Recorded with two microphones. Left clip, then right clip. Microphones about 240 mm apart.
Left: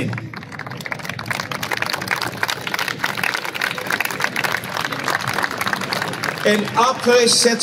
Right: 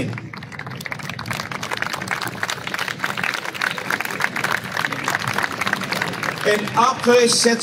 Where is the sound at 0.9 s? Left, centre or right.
Left.